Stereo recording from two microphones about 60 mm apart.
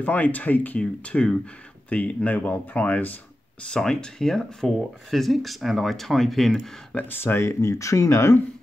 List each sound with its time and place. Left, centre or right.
0.0 s speech: left
3.7 s speech: centre
7.0 s speech: left
7.4 s speech: left